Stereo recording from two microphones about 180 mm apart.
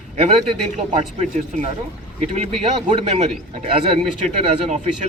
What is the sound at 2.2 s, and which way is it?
A man's voice, 40° right (ahead or behind).